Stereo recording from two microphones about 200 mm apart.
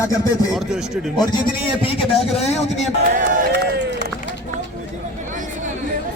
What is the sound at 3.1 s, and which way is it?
Run, 50° right (ahead or behind).